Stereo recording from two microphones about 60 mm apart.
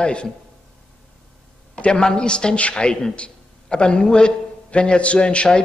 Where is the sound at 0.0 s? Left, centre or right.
Centre.